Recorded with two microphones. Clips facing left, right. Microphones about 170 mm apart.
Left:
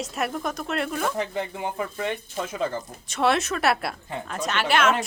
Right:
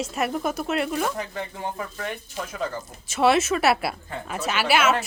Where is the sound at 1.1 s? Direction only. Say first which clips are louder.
Left 3 dB; 20° left (ahead or behind).